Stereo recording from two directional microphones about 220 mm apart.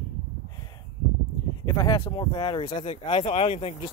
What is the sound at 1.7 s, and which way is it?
Speech, 20° left (ahead or behind).